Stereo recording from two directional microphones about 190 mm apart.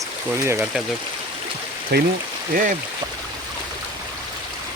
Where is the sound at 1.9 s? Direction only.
60° right (ahead or behind).